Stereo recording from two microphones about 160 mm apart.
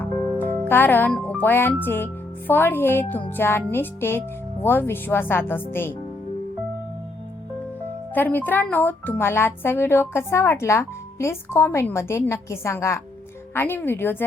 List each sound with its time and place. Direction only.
0.0 s music: 15° left (ahead or behind)
2.5 s speech: 10° left (ahead or behind)
8.1 s speech: 10° left (ahead or behind)